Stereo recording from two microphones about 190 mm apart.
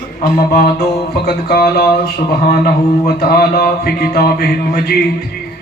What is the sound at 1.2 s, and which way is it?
Mantra, 55° left (ahead or behind).